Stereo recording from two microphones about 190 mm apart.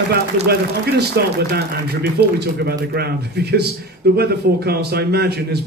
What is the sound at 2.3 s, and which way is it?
Speech, 55° right (ahead or behind).